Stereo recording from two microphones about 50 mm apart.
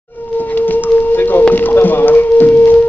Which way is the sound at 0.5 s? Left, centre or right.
Left.